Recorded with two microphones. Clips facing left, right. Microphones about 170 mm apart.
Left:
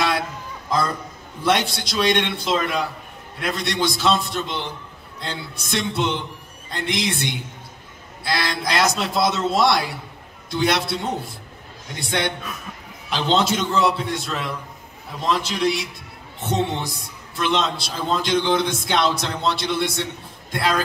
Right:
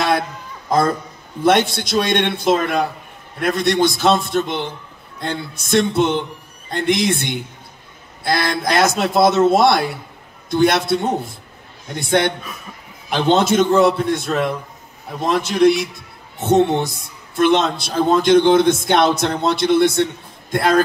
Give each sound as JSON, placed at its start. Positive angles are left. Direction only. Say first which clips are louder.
{"t": 0.7, "sound": "a man's voice", "louder": "right 6 dB", "side_deg": -50}